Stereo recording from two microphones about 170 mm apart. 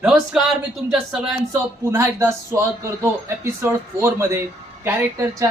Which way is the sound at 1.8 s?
15° right (ahead or behind).